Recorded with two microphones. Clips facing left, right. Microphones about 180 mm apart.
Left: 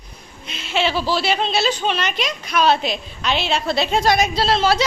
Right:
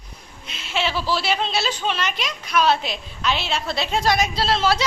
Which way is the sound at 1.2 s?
5° right (ahead or behind).